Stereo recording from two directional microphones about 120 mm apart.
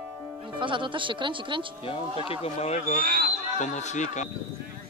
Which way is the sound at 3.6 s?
80° left.